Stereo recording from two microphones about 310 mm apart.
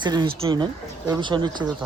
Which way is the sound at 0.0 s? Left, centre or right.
Centre.